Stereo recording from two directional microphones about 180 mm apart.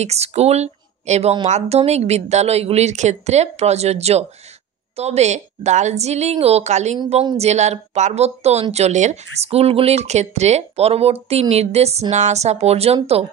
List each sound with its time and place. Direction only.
0.0 s a woman's voice: 35° right (ahead or behind)